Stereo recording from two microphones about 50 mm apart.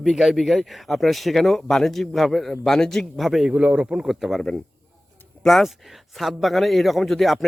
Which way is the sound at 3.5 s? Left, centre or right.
Right.